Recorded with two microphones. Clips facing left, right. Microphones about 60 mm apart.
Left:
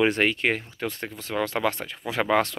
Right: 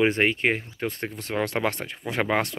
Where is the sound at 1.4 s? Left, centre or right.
Right.